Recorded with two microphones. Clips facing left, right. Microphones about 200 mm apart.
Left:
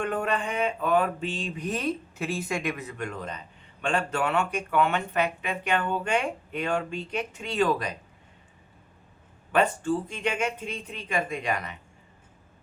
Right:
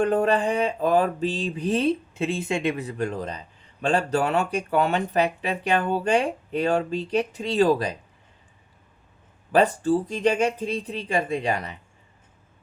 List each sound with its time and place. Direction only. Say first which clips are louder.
0.0 s mantra: right 7 dB; 35° right (ahead or behind)
9.5 s mantra: right 5 dB; 35° right (ahead or behind)